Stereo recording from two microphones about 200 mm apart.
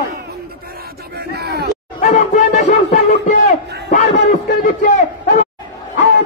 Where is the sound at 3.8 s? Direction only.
50° left (ahead or behind).